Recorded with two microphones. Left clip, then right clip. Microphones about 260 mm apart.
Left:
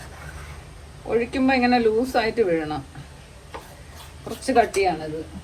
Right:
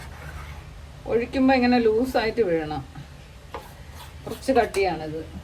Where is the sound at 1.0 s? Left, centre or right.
Centre.